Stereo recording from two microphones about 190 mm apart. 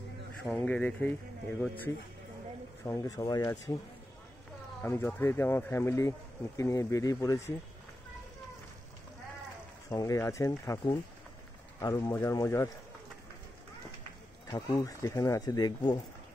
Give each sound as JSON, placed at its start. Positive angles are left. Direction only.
{"t": 0.4, "sound": "speech", "side_deg": 5}
{"t": 2.8, "sound": "speech", "side_deg": 15}
{"t": 4.8, "sound": "speech", "side_deg": 10}
{"t": 9.8, "sound": "speech", "side_deg": 15}
{"t": 14.5, "sound": "speech", "side_deg": 20}